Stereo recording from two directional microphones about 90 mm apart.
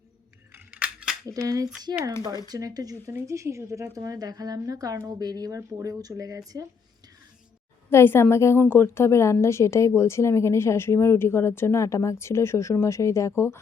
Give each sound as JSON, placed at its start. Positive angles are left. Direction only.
{"t": 0.7, "sound": "a sound", "side_deg": -10}
{"t": 1.3, "sound": "speech", "side_deg": -40}
{"t": 7.9, "sound": "a woman's voice", "side_deg": 25}